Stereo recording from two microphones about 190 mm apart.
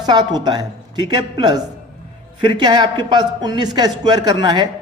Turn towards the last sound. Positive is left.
turn(degrees=-25)  # may be behind; listen again after turning